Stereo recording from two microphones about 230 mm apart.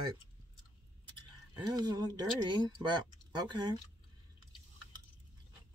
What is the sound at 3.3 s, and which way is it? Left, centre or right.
Speech, centre.